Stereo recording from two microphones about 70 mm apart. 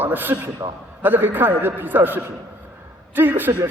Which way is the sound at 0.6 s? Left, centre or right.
Right.